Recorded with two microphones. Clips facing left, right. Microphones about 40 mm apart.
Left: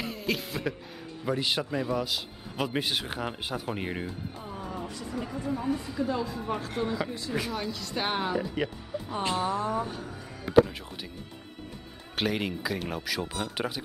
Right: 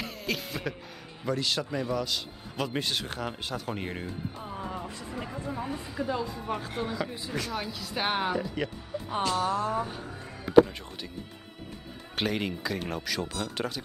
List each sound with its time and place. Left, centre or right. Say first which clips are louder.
0.0 s music: left 2 dB; centre
1.2 s a man's voice: left 1 dB; centre
4.4 s music: even; centre
4.8 s speech: left 2 dB; centre
8.4 s a man's voice: left 1 dB; centre
9.2 s speech: right 1 dB; left
9.8 s speech: even; centre
10.5 s music: right 2 dB; centre
12.2 s a man's voice: left 1 dB; centre